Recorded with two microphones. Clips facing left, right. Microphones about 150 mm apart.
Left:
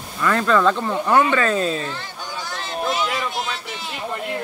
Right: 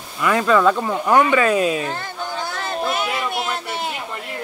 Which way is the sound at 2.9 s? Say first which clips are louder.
Right 1 dB; 55° right (ahead or behind).